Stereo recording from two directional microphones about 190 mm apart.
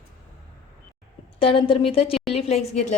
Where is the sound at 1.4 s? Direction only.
30° left (ahead or behind).